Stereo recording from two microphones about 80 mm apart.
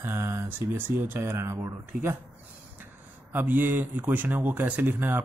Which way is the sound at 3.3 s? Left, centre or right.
Right.